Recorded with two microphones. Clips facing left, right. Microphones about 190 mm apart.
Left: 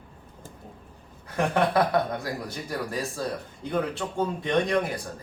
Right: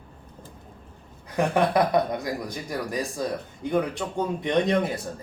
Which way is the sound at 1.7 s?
20° right (ahead or behind).